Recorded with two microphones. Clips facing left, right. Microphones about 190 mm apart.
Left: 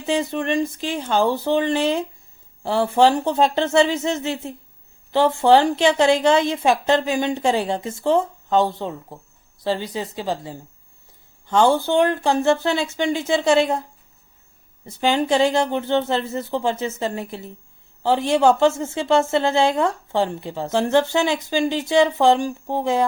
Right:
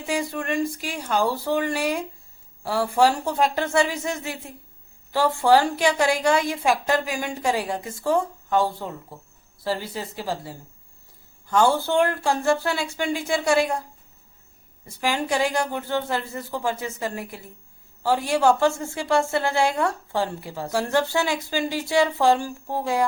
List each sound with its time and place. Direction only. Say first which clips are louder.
0.0 s a woman's voice: left 5 dB; 25° left (ahead or behind)
14.8 s a woman's voice: left 6 dB; 25° left (ahead or behind)